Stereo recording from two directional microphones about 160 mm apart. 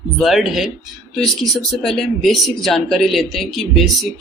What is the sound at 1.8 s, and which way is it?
Speech, centre (ahead or behind).